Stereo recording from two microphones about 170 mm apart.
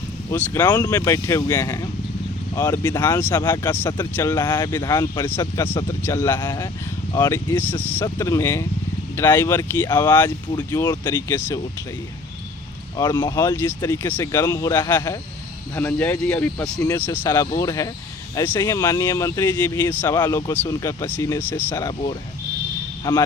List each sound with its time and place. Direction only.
0.3 s speech: 15° left (ahead or behind)
4.4 s speech: 25° left (ahead or behind)
5.2 s speech: 15° left (ahead or behind)
13.0 s speech: 25° left (ahead or behind)
13.4 s speech: 15° left (ahead or behind)